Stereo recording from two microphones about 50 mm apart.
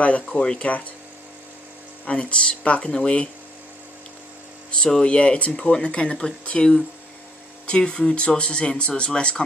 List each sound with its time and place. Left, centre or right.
0.2 s speech: centre
2.0 s speech: left
4.6 s a sound: left
4.9 s speech: left